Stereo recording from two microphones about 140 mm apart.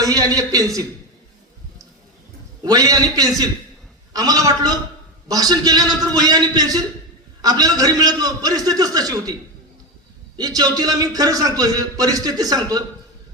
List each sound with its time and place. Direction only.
0.0 s a man's voice: 25° right (ahead or behind)
2.6 s a man's voice: 25° right (ahead or behind)
10.6 s a man's voice: 25° right (ahead or behind)